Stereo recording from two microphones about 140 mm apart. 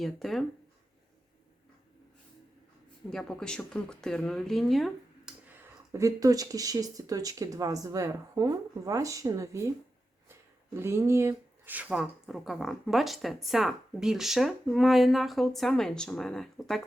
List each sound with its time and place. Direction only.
0.0 s speech: centre (ahead or behind)
3.1 s speech: 5° left (ahead or behind)
5.5 s speech: 20° right (ahead or behind)
10.8 s speech: 20° right (ahead or behind); by 16.8 s centre (ahead or behind)